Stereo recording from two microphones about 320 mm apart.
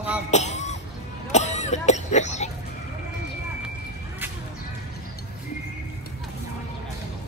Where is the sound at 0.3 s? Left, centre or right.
Left.